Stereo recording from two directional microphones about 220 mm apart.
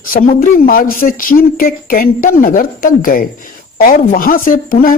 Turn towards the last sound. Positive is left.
turn(degrees=40)  # may be behind; listen again after turning